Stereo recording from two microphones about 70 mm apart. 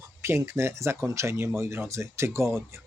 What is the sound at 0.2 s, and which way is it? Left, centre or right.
Speech, right.